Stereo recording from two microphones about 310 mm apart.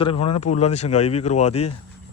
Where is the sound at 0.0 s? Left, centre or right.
Centre.